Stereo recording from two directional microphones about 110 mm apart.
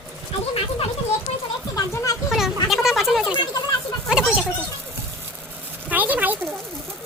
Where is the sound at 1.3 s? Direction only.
75° left (ahead or behind).